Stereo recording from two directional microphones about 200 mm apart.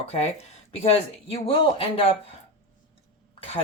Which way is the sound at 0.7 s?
30° left (ahead or behind).